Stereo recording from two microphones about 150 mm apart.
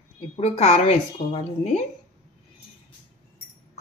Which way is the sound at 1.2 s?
35° left (ahead or behind).